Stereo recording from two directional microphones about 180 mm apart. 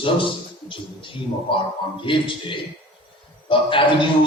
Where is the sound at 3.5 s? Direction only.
30° left (ahead or behind).